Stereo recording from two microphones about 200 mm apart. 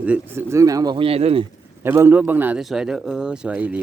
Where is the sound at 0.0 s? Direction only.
10° right (ahead or behind); by 1.5 s 30° right (ahead or behind).